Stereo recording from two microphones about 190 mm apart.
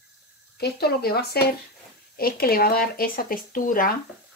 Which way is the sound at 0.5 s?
55° left (ahead or behind).